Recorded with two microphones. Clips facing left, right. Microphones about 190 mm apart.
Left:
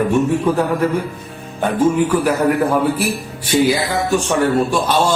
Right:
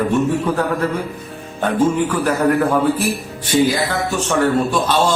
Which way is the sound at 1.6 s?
10° left (ahead or behind).